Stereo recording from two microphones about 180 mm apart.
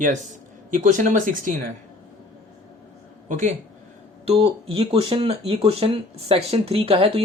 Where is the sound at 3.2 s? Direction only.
45° right (ahead or behind).